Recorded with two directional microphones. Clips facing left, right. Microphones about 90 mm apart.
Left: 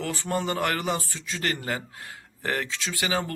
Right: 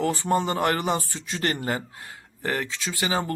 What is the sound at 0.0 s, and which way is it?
Speech, 30° right (ahead or behind).